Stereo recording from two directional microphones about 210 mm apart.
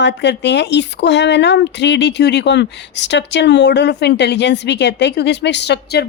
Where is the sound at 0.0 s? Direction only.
55° left (ahead or behind).